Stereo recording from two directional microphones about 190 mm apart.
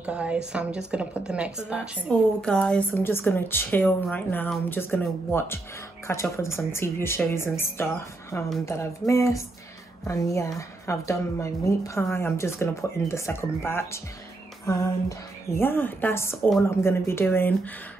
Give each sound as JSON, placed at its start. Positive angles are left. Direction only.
{"t": 0.0, "sound": "a woman's voice", "side_deg": -5}
{"t": 2.4, "sound": "a woman's voice", "side_deg": 5}